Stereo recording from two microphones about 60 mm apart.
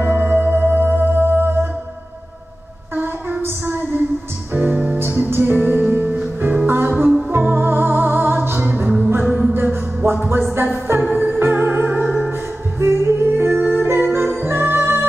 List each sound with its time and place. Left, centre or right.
0.0 s music: right
3.0 s a sound: right
4.6 s music: right
7.2 s music: right
8.5 s music: right
9.5 s music: right
12.3 s music: right